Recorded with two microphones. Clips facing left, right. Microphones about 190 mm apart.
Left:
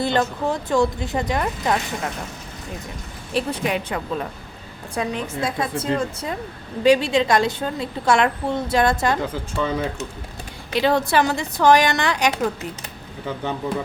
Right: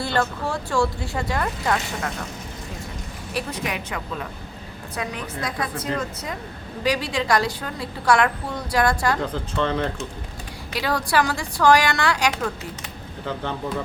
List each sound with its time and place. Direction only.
0.0 s a woman's voice: 20° left (ahead or behind)
3.3 s a woman's voice: 30° left (ahead or behind)
9.2 s speech: 5° left (ahead or behind)
10.7 s a woman's voice: 25° left (ahead or behind)